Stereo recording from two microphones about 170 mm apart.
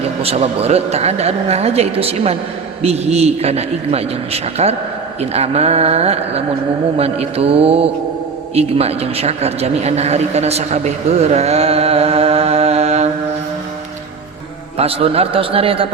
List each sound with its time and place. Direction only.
0.0 s a woman's voice: 35° right (ahead or behind)
14.8 s a woman's voice: 35° right (ahead or behind)